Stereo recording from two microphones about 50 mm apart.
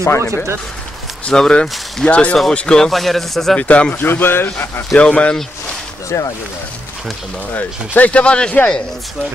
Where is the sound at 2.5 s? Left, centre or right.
Centre.